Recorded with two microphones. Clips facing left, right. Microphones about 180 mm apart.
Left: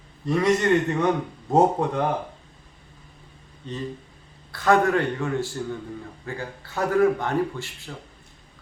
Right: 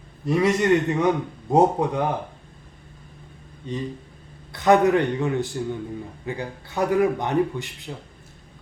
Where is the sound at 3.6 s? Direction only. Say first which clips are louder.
Right 2 dB; 10° right (ahead or behind).